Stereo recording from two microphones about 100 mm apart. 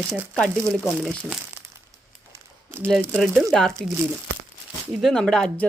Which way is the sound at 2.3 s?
20° right (ahead or behind).